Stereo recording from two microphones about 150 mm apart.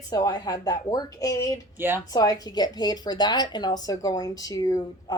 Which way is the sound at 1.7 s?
15° right (ahead or behind).